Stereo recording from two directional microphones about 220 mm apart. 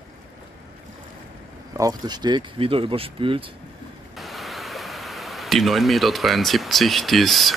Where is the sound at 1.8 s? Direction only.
15° right (ahead or behind).